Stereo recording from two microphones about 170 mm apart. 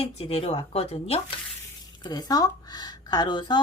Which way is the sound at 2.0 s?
25° left (ahead or behind).